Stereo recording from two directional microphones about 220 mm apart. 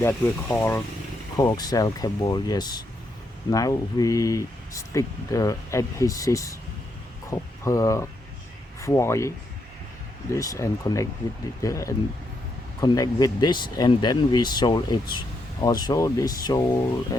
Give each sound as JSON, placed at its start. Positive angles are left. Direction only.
{"t": 0.0, "sound": "speech", "side_deg": 10}
{"t": 10.3, "sound": "speech", "side_deg": 15}